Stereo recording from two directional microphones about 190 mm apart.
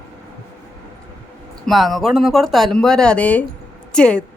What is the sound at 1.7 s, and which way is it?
Speech, centre (ahead or behind).